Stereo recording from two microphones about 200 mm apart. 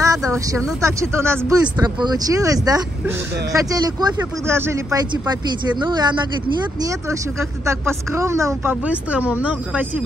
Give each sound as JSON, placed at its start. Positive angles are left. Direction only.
{"t": 0.0, "sound": "speech", "side_deg": -15}